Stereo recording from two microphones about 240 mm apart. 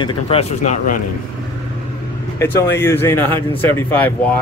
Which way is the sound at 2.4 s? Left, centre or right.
Centre.